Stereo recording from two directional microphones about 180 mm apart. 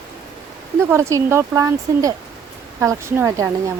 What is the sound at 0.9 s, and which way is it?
Speech, 15° right (ahead or behind).